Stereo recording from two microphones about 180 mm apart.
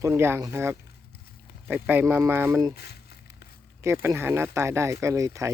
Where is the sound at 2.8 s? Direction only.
65° left (ahead or behind).